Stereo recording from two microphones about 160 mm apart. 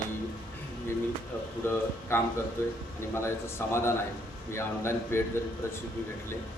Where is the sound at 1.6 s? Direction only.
15° left (ahead or behind).